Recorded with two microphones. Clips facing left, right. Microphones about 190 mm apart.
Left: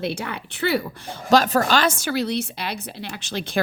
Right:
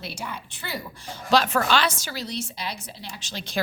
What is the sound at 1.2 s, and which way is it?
A woman's voice, 45° left (ahead or behind).